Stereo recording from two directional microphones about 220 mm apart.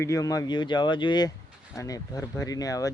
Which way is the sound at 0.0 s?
15° left (ahead or behind).